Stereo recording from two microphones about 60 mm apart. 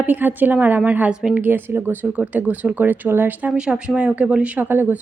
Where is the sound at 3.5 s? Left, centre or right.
Centre.